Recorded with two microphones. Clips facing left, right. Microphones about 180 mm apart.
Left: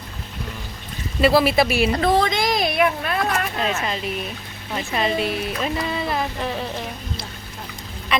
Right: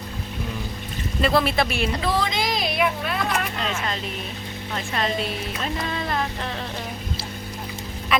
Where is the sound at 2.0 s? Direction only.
50° left (ahead or behind).